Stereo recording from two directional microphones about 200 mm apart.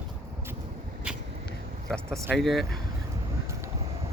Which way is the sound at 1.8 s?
5° left (ahead or behind).